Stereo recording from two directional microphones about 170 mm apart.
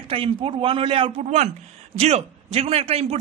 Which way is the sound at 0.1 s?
30° right (ahead or behind).